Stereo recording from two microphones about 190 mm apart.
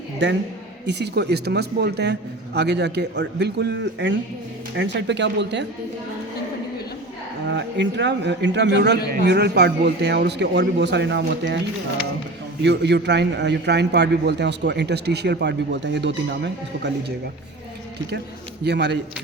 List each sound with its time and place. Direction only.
0.2 s a man's voice: 65° right (ahead or behind)
7.4 s a man's voice: 65° right (ahead or behind)
12.6 s a man's voice: 65° right (ahead or behind)
18.6 s a man's voice: 60° right (ahead or behind)